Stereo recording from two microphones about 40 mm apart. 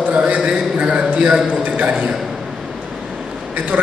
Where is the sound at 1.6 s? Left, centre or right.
Right.